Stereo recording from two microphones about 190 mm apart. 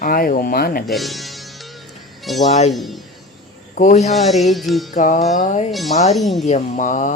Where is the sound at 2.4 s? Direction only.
35° left (ahead or behind).